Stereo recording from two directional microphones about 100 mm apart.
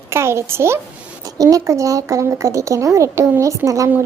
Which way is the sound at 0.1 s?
25° right (ahead or behind).